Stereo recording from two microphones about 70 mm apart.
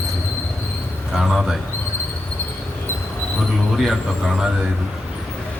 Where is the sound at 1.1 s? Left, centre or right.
Centre.